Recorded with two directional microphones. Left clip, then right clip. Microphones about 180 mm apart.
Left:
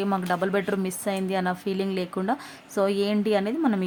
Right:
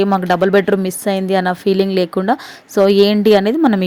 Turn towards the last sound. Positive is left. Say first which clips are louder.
# right 11 dB
turn(degrees=-40)  # may be behind; listen again after turning